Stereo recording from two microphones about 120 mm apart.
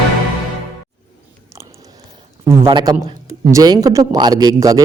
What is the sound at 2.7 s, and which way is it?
Speech, 40° right (ahead or behind).